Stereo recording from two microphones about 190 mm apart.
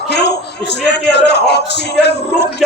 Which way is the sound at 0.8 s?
60° left (ahead or behind).